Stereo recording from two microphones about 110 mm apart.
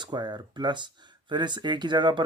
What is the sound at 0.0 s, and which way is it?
Speech, 40° right (ahead or behind).